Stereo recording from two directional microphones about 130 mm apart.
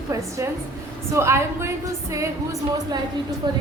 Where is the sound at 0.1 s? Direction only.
25° right (ahead or behind).